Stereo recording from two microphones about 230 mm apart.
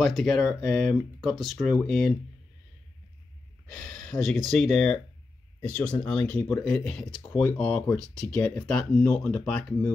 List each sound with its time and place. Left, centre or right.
0.0 s speech: centre
3.7 s speech: centre